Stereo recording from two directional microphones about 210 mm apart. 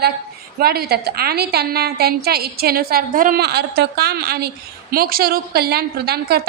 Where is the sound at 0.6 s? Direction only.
50° right (ahead or behind).